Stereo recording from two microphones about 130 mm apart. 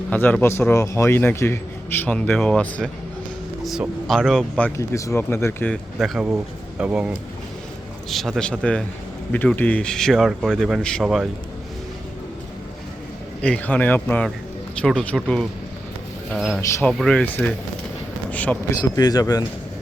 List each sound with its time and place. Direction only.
0.1 s a man's voice: 15° left (ahead or behind)
4.8 s speech: 25° left (ahead or behind)
5.7 s a man's voice: centre (ahead or behind)
11.0 s speech: 5° right (ahead or behind)
13.4 s a man's voice: 10° left (ahead or behind)
18.8 s speech: 30° left (ahead or behind)